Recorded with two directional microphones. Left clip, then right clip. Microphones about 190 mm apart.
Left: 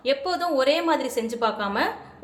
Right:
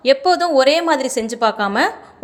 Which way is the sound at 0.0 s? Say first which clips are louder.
Right 10 dB; 40° right (ahead or behind).